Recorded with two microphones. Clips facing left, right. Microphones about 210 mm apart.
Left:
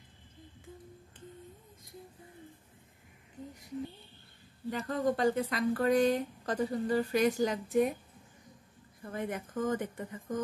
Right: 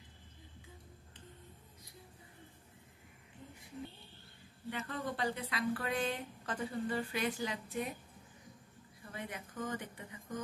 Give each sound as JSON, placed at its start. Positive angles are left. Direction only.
{"t": 4.6, "sound": "speech", "side_deg": 40}
{"t": 9.0, "sound": "speech", "side_deg": 50}